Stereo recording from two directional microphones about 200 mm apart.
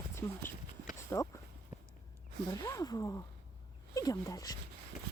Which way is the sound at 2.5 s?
15° left (ahead or behind).